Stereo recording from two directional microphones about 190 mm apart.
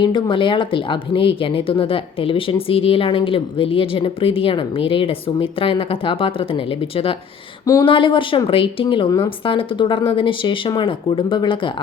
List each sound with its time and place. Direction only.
0.0 s speech: 25° left (ahead or behind)